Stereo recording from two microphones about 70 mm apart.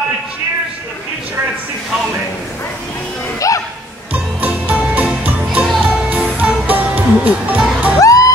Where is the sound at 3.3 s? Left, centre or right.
Left.